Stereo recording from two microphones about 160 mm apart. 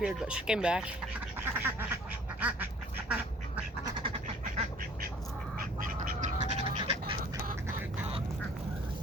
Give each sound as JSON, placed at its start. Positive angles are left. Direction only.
{"t": 0.0, "sound": "speech", "side_deg": -5}
{"t": 1.4, "sound": "duck", "side_deg": -10}
{"t": 3.8, "sound": "duck", "side_deg": -30}
{"t": 5.5, "sound": "duck", "side_deg": -60}